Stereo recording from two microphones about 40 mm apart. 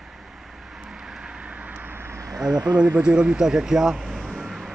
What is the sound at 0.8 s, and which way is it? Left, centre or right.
Vehicle, centre.